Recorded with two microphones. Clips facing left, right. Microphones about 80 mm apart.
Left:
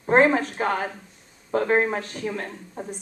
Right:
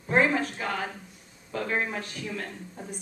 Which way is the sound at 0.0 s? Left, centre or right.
Left.